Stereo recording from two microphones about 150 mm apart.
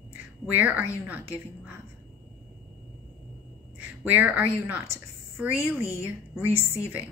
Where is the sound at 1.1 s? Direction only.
10° right (ahead or behind).